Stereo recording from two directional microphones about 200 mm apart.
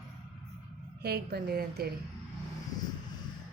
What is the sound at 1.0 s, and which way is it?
Speech, 50° right (ahead or behind).